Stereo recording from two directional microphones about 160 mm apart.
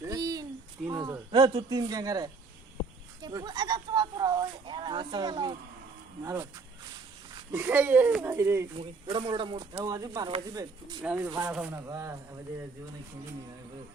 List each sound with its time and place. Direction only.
0.0 s a sound: 20° right (ahead or behind)
0.9 s speech: 20° right (ahead or behind)
6.2 s speech: 15° right (ahead or behind)
7.5 s speech: 15° right (ahead or behind)
8.7 s speech: 30° right (ahead or behind)
11.0 s speech: 10° right (ahead or behind)